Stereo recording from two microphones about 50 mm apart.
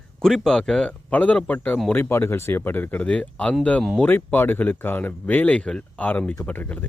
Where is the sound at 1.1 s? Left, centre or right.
Left.